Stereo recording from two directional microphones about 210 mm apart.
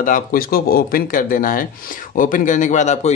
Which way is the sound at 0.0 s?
40° left (ahead or behind).